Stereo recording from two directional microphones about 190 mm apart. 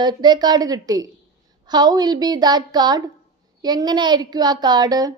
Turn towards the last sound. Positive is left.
turn(degrees=-20)  # may be behind; listen again after turning